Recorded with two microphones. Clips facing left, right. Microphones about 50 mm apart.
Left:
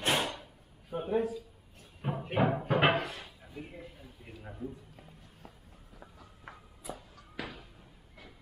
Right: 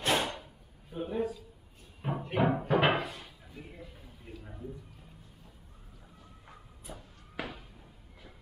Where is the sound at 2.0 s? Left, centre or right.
Centre.